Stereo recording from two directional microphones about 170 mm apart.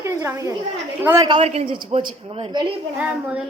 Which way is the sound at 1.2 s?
30° right (ahead or behind).